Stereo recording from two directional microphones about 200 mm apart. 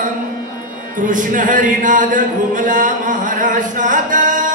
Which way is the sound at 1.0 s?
40° right (ahead or behind).